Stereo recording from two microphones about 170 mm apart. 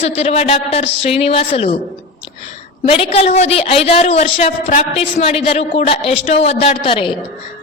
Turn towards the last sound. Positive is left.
turn(degrees=35)  # may be behind; listen again after turning